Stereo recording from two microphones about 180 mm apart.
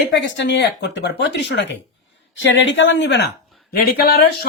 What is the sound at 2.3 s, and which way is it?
Speech, 90° left.